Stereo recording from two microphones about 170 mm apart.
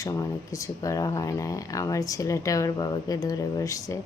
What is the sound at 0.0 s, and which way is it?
A woman's voice, 20° left (ahead or behind).